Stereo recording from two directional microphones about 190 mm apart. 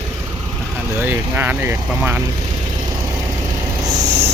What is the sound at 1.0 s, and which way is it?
Speech, 10° right (ahead or behind).